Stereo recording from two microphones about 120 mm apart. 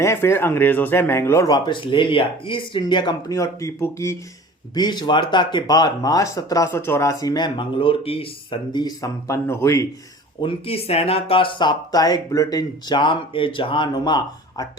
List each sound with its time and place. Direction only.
0.0 s speech: 20° left (ahead or behind)
1.5 s speech: 35° left (ahead or behind)
3.3 s speech: 25° left (ahead or behind)
4.7 s speech: 35° left (ahead or behind)
10.4 s speech: 55° left (ahead or behind); by 14.7 s 35° left (ahead or behind)